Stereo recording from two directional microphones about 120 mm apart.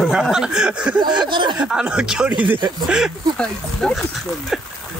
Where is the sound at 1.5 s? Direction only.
5° right (ahead or behind).